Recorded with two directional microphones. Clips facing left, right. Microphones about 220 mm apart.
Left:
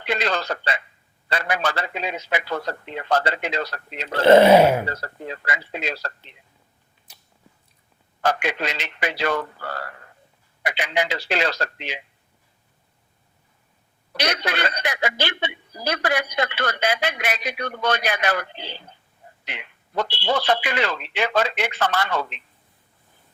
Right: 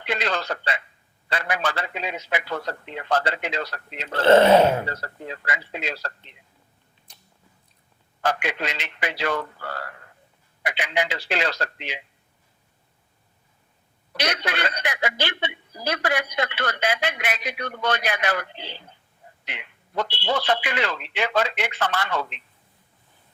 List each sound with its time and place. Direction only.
0.0 s a man's voice: 40° left (ahead or behind)
4.1 s speech: 10° left (ahead or behind)
4.9 s speech: 40° left (ahead or behind)
7.1 s biting: 5° left (ahead or behind)
8.2 s speech: 40° left (ahead or behind)
14.2 s speech: 40° left (ahead or behind)